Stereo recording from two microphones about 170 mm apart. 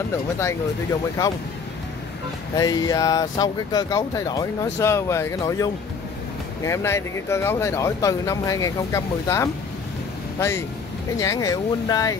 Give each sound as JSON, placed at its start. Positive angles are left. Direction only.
{"t": 2.5, "sound": "speech", "side_deg": 20}
{"t": 11.1, "sound": "speech", "side_deg": 20}